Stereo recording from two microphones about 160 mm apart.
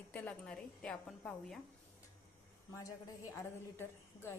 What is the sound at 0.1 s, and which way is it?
A woman's voice, 10° left (ahead or behind).